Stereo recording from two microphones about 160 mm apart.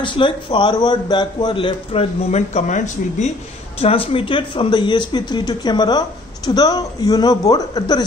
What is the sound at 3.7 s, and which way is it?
Speech, 35° left (ahead or behind).